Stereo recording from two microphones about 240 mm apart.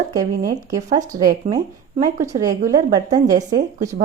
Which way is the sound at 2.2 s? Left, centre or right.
Centre.